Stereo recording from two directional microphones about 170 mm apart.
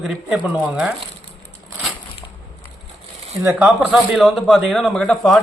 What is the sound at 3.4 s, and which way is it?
Speech, 15° right (ahead or behind).